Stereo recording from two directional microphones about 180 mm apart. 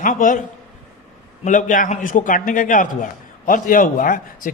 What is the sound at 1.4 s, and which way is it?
A man's voice, 45° left (ahead or behind).